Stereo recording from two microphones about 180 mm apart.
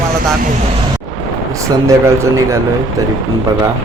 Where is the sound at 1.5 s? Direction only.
15° right (ahead or behind).